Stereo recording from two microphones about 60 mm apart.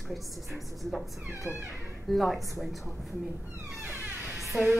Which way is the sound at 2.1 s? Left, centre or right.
Centre.